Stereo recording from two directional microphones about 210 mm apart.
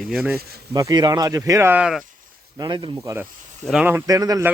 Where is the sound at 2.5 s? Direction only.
20° right (ahead or behind).